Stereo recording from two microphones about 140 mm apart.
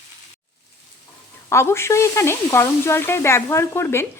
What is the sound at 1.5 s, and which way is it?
Speech, 20° left (ahead or behind).